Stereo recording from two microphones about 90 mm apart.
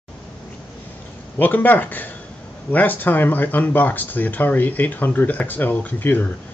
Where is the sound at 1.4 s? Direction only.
20° left (ahead or behind).